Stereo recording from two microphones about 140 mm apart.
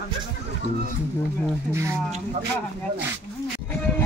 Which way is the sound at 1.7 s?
20° right (ahead or behind).